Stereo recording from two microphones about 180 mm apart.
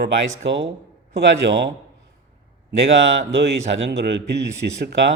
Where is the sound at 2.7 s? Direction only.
75° right (ahead or behind).